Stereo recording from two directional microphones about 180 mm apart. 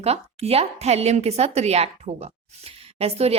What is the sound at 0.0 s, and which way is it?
A woman's voice, 35° right (ahead or behind).